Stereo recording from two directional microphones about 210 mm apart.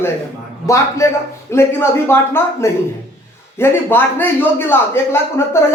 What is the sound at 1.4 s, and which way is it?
Speech, 10° left (ahead or behind).